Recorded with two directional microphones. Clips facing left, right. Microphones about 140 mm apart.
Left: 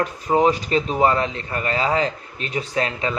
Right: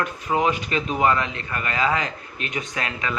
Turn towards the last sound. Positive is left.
turn(degrees=30)  # may be behind; listen again after turning